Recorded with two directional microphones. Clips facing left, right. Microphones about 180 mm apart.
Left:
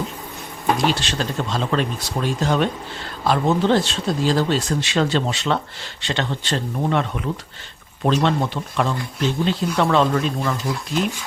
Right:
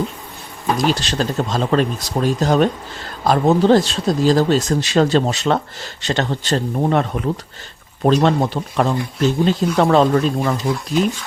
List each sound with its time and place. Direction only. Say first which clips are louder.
0.8 s speech: right 3 dB; 40° right (ahead or behind)